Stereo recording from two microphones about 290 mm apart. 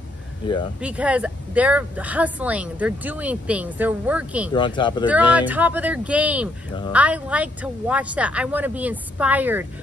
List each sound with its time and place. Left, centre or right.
0.7 s speech: centre
4.6 s speech: centre
5.0 s speech: centre